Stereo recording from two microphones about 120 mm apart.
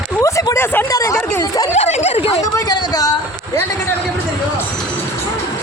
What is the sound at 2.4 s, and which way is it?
Speech, 25° left (ahead or behind).